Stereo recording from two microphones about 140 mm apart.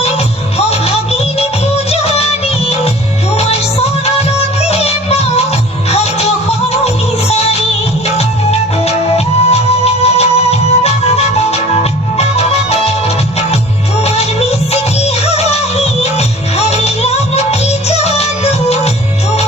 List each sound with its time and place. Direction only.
0.7 s music: 45° left (ahead or behind)
14.0 s music: 50° left (ahead or behind)